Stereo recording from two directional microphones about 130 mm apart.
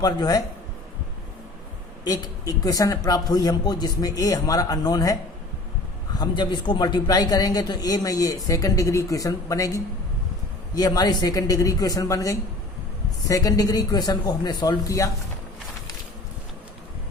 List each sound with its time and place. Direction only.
0.0 s a man's voice: 30° left (ahead or behind)
2.0 s a man's voice: 25° left (ahead or behind)
6.1 s a man's voice: 35° left (ahead or behind)